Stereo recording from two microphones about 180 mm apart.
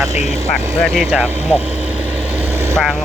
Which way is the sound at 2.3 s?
10° right (ahead or behind).